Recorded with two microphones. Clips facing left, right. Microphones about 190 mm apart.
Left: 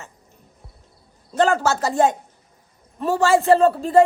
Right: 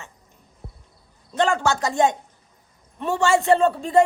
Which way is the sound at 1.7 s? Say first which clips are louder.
Left 2 dB; 35° left (ahead or behind).